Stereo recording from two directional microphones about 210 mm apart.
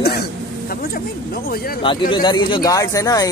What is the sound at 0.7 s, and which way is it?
Speech, 45° left (ahead or behind).